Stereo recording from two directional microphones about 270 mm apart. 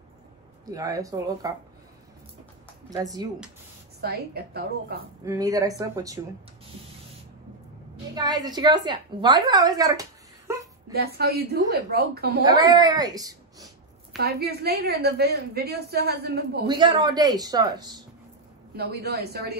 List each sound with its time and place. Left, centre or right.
0.7 s a woman's voice: centre
2.9 s a woman's voice: centre
4.0 s a woman's voice: right
5.2 s a woman's voice: centre
8.1 s a woman's voice: centre
10.9 s a woman's voice: right
12.4 s a woman's voice: centre
14.2 s a woman's voice: right
16.6 s a woman's voice: centre
18.8 s a woman's voice: right